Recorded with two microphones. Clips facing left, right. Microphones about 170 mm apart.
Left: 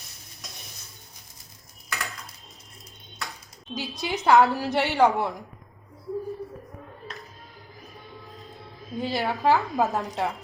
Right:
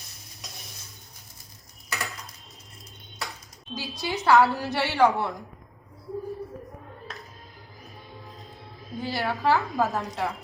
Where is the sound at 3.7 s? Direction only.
20° left (ahead or behind).